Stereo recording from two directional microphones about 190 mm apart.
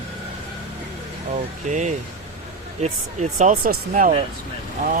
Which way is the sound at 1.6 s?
40° right (ahead or behind).